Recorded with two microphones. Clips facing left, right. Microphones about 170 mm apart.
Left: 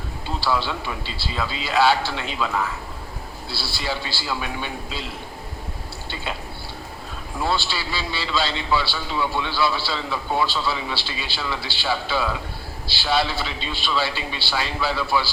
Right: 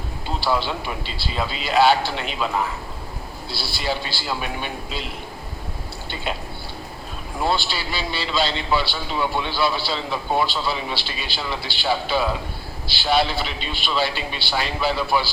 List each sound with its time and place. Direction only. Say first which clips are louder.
0.3 s a man's voice: right 1 dB; 20° right (ahead or behind)
7.4 s a man's voice: right 2 dB; 20° right (ahead or behind)